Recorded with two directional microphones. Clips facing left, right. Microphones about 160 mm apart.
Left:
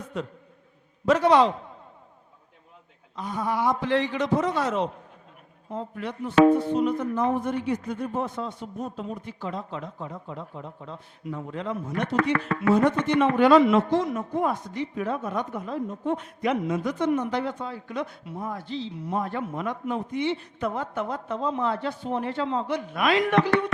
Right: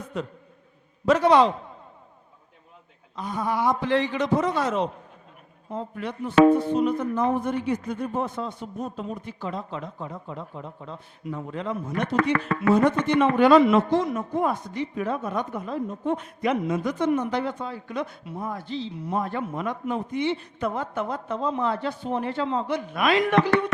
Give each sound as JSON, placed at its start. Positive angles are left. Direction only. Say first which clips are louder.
{"t": 0.0, "sound": "a sound", "louder": "right 1 dB", "side_deg": -10}
{"t": 1.0, "sound": "speech", "louder": "right 1 dB", "side_deg": -10}
{"t": 3.2, "sound": "speech", "louder": "right 1 dB", "side_deg": -15}
{"t": 6.0, "sound": "speech", "louder": "right 1 dB", "side_deg": -10}
{"t": 11.5, "sound": "speech", "louder": "right 1 dB", "side_deg": -15}